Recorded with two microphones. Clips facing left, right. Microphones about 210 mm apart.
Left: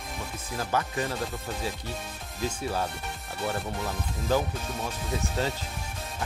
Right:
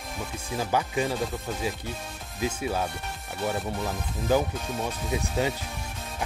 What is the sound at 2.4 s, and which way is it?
Speech, 5° right (ahead or behind).